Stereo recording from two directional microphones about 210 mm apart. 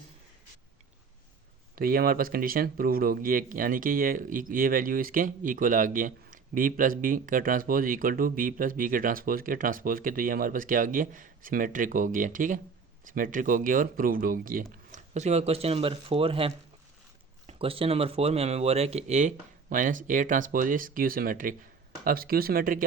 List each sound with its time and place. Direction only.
1.7 s speech: 45° right (ahead or behind)